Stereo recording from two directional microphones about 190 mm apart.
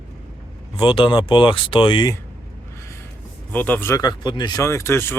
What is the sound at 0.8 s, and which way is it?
Speech, 25° left (ahead or behind).